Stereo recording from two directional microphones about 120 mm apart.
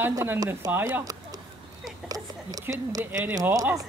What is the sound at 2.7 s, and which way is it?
Speech, 30° right (ahead or behind).